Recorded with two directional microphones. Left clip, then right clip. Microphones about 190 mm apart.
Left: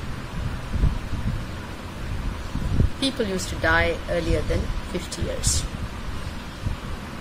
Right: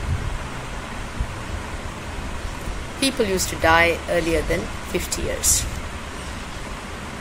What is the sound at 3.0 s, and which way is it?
Speech, 10° left (ahead or behind).